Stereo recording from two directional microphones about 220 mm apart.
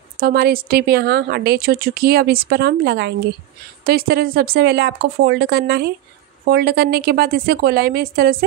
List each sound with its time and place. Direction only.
0.2 s speech: 45° right (ahead or behind)